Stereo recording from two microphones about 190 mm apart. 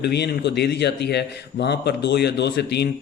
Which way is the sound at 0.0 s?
60° left (ahead or behind).